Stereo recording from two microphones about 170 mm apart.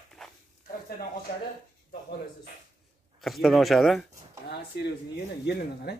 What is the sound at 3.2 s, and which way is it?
Speech, centre (ahead or behind).